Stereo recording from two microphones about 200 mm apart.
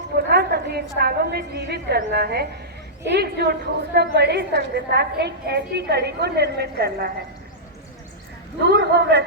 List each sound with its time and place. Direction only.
0.3 s a woman's voice: 55° right (ahead or behind)
8.6 s a woman's voice: 60° right (ahead or behind)